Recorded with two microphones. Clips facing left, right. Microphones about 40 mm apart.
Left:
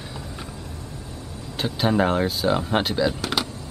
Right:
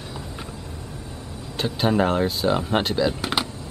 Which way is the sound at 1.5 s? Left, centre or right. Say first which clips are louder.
Even; centre.